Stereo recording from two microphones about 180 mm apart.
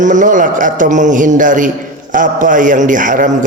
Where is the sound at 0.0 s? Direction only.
45° right (ahead or behind).